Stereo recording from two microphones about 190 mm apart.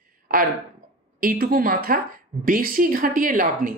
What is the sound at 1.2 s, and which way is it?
A woman's voice, 50° right (ahead or behind).